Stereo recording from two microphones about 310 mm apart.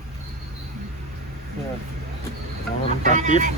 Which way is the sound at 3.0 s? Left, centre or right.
Right.